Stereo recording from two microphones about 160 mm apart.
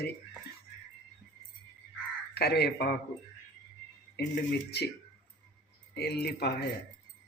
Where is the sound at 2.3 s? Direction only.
90° left.